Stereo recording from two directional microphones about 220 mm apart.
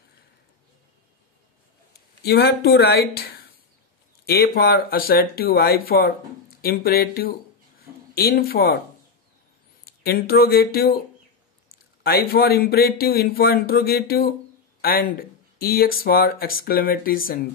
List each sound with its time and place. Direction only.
2.2 s speech: 45° left (ahead or behind)
10.0 s speech: 45° left (ahead or behind)
12.0 s speech: 45° left (ahead or behind)